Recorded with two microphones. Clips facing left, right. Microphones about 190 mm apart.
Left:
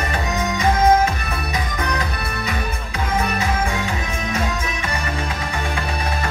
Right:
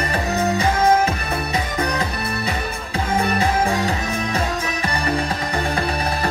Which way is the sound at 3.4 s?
35° right (ahead or behind).